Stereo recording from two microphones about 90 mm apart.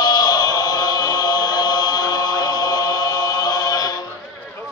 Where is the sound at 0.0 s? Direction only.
45° left (ahead or behind).